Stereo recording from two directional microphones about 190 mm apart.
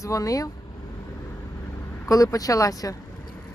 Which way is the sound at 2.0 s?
20° left (ahead or behind).